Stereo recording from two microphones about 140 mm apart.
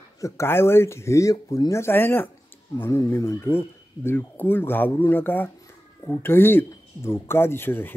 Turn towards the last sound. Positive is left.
turn(degrees=15)  # may be behind; listen again after turning